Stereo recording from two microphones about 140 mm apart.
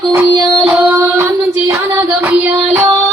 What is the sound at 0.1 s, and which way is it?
Music, 25° right (ahead or behind).